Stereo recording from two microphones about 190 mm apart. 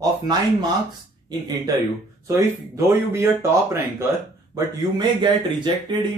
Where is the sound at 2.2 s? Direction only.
15° right (ahead or behind).